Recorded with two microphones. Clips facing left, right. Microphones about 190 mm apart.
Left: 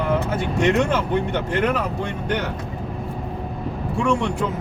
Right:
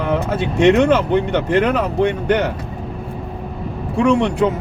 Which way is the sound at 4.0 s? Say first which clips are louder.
Right 7 dB; 70° right (ahead or behind).